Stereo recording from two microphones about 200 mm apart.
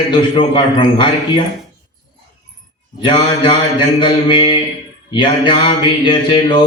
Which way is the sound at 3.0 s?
25° left (ahead or behind).